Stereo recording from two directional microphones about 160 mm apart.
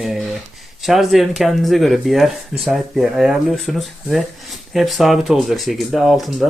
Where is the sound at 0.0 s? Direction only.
Centre (ahead or behind).